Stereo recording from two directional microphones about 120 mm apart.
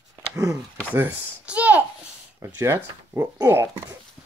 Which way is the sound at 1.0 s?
15° right (ahead or behind).